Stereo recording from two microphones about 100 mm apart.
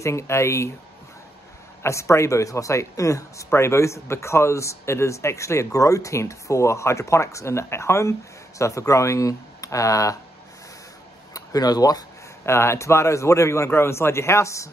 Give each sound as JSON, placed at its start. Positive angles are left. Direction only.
{"t": 0.0, "sound": "speech", "side_deg": 30}
{"t": 1.8, "sound": "speech", "side_deg": 30}
{"t": 11.3, "sound": "speech", "side_deg": 40}
{"t": 12.4, "sound": "speech", "side_deg": 25}